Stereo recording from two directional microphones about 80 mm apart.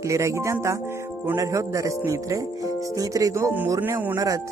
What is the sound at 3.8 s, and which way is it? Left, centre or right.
Speech, right.